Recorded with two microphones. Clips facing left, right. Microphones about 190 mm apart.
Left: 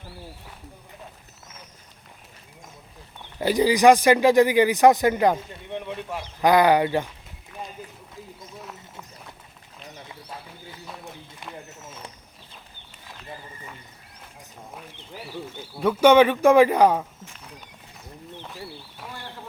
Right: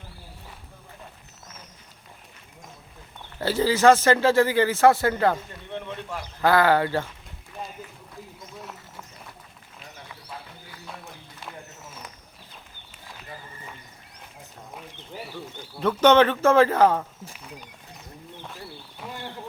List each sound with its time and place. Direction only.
3.3 s speech: 15° left (ahead or behind)
15.5 s speech: 10° left (ahead or behind)
18.4 s a sound: centre (ahead or behind)